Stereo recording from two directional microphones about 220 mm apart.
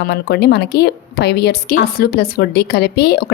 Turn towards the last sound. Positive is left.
turn(degrees=45)  # may be behind; listen again after turning